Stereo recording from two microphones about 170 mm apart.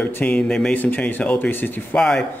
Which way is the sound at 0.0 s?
10° left (ahead or behind).